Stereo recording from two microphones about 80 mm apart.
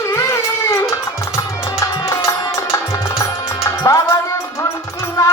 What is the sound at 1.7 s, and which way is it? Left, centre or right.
Music, left.